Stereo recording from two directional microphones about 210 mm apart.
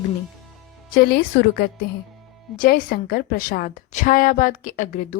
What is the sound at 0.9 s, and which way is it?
A woman's voice, 45° left (ahead or behind).